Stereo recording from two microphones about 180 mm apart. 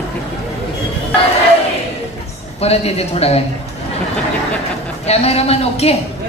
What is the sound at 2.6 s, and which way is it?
Speech, 35° left (ahead or behind).